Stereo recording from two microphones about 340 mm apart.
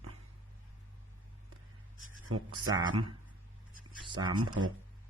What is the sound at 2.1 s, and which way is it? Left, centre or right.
Speech, right.